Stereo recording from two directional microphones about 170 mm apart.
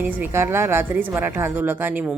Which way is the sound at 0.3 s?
15° right (ahead or behind).